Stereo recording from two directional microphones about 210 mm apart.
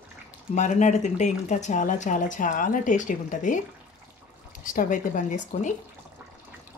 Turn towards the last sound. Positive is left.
turn(degrees=35)  # may be behind; listen again after turning